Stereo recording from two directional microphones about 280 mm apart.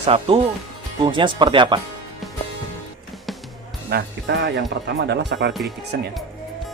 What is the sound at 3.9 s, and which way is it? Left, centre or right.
Speech, right.